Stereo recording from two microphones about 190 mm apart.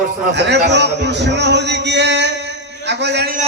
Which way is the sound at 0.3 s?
65° right (ahead or behind).